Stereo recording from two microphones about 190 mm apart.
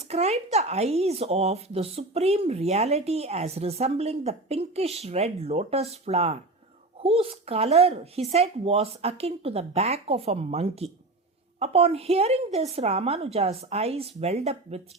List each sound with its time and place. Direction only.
0.0 s speech: 35° right (ahead or behind)